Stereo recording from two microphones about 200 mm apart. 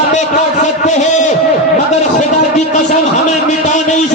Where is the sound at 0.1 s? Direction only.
35° left (ahead or behind).